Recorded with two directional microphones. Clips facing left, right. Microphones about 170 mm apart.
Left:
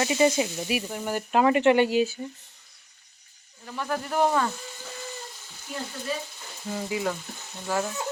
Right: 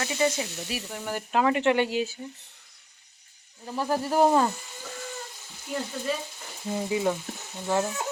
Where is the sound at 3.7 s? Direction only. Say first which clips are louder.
Right 3 dB; 30° right (ahead or behind).